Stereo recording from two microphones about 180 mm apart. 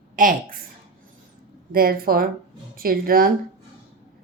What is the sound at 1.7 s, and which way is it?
A woman's voice, 55° right (ahead or behind).